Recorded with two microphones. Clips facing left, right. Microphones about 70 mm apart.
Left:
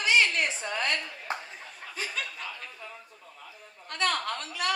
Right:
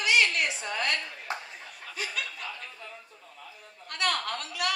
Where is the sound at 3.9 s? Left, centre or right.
Left.